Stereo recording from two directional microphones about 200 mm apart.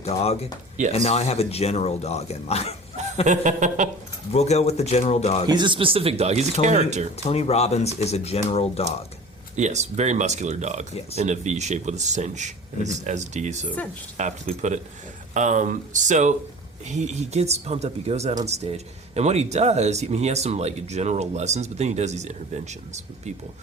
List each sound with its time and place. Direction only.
0.0 s speech: 30° left (ahead or behind)
3.2 s speech: 40° right (ahead or behind)
4.3 s speech: 35° left (ahead or behind)
5.5 s speech: 20° right (ahead or behind)
7.3 s speech: 30° left (ahead or behind)
9.6 s speech: 35° right (ahead or behind)